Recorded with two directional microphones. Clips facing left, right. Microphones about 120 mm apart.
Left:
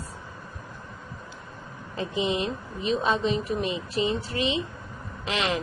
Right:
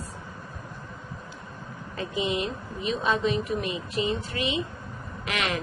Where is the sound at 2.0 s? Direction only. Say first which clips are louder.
Left 1 dB; 30° left (ahead or behind).